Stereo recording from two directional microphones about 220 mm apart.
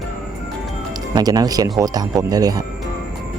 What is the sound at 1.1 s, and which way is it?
Speech, 15° right (ahead or behind).